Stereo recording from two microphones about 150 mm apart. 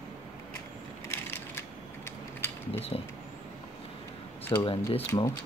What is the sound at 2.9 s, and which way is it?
Speech, 40° left (ahead or behind).